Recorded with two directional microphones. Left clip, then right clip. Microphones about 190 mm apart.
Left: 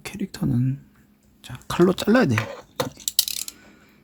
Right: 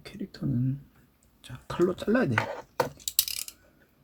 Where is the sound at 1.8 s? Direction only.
40° left (ahead or behind).